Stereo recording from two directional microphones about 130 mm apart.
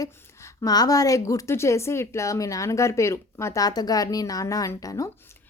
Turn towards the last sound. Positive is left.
turn(degrees=25)  # may be behind; listen again after turning